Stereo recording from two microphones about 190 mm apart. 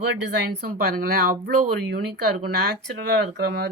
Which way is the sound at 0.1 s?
55° right (ahead or behind).